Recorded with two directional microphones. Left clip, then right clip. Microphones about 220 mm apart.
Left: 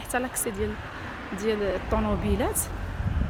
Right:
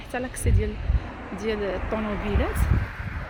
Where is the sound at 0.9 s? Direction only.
55° left (ahead or behind).